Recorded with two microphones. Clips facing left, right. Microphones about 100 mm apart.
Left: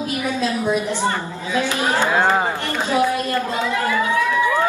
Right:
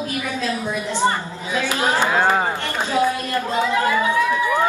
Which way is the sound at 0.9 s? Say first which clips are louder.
Right 1 dB; 15° right (ahead or behind).